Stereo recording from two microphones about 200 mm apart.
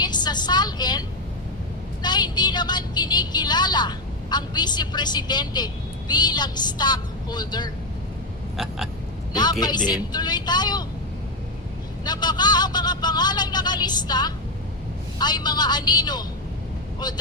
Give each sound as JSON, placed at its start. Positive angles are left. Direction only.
{"t": 0.0, "sound": "a woman's voice", "side_deg": 20}
{"t": 8.5, "sound": "a sound", "side_deg": 0}
{"t": 9.3, "sound": "speech", "side_deg": 20}
{"t": 12.0, "sound": "speech", "side_deg": 20}